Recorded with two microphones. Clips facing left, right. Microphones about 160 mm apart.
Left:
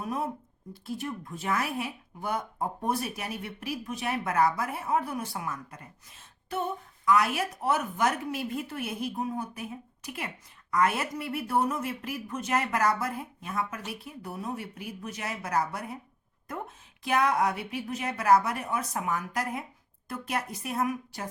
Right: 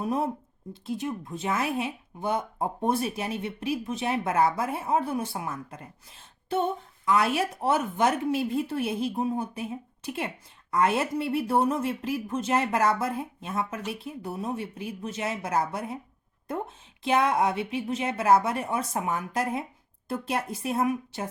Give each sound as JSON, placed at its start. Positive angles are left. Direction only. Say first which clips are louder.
{"t": 0.0, "sound": "speech", "louder": "right 5 dB", "side_deg": -30}